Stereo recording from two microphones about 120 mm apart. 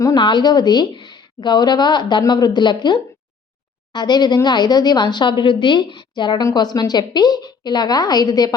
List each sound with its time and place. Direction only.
0.0 s a woman's voice: 35° left (ahead or behind)